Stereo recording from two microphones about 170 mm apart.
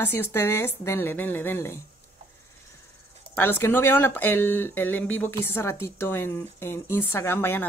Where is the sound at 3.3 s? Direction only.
10° left (ahead or behind).